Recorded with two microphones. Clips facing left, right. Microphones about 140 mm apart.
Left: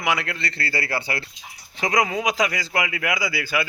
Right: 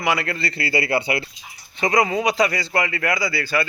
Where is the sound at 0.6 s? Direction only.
15° right (ahead or behind).